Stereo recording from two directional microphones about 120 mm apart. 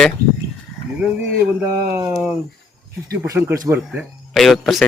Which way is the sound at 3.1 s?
25° right (ahead or behind).